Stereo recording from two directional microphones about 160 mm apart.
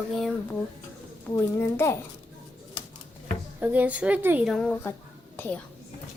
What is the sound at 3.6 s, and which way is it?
Speech, 10° right (ahead or behind).